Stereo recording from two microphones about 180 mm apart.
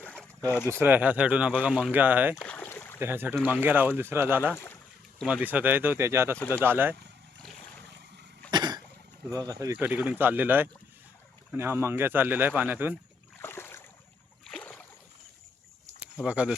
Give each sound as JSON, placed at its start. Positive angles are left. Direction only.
{"t": 0.0, "sound": "boat", "side_deg": 5}
{"t": 0.7, "sound": "speech", "side_deg": -10}
{"t": 2.3, "sound": "boat", "side_deg": 5}
{"t": 3.0, "sound": "speech", "side_deg": -10}
{"t": 4.5, "sound": "a sound", "side_deg": 15}
{"t": 5.2, "sound": "speech", "side_deg": -10}
{"t": 8.4, "sound": "cough", "side_deg": -25}
{"t": 9.3, "sound": "speech", "side_deg": -20}
{"t": 13.4, "sound": "a sound", "side_deg": 15}
{"t": 14.4, "sound": "boat", "side_deg": 5}
{"t": 16.0, "sound": "a sound", "side_deg": -5}